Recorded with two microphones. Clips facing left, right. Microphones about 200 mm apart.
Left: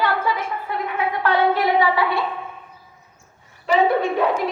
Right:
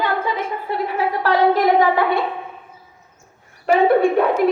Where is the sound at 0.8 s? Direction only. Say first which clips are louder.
Right 2 dB; 35° right (ahead or behind).